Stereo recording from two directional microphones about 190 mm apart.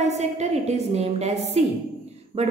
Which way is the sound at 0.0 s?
35° right (ahead or behind).